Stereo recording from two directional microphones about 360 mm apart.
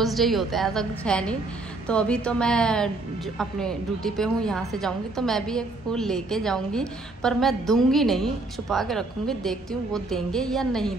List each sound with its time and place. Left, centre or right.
0.0 s a woman's voice: centre